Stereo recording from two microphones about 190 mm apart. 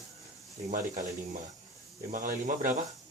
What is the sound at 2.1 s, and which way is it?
Speech, 40° right (ahead or behind).